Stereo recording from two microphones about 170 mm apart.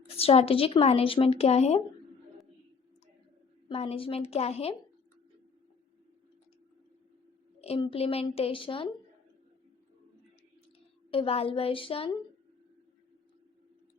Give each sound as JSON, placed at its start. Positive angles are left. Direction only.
{"t": 0.2, "sound": "speech", "side_deg": 35}
{"t": 3.7, "sound": "speech", "side_deg": 35}
{"t": 7.6, "sound": "speech", "side_deg": 35}
{"t": 11.1, "sound": "speech", "side_deg": 35}